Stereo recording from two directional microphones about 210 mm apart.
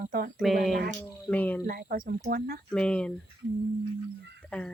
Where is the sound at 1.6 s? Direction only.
45° right (ahead or behind).